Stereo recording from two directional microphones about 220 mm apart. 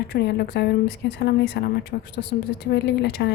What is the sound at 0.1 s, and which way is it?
Speech, 50° left (ahead or behind).